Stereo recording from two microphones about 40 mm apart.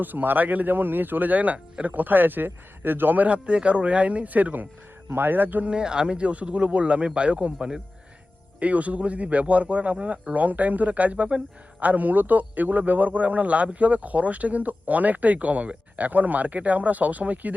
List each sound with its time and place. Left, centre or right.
0.0 s a man's voice: right
3.2 s speech: right
5.1 s speech: right
5.6 s speech: right
8.5 s speech: right